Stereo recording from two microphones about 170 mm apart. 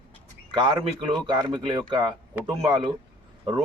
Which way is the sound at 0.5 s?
30° right (ahead or behind).